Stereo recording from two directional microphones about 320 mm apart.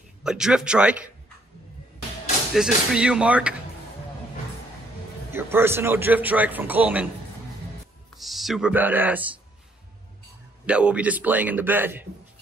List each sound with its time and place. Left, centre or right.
0.2 s a man's voice: centre
2.5 s a man's voice: centre
5.3 s a man's voice: centre
8.2 s a man's voice: centre
10.7 s a man's voice: centre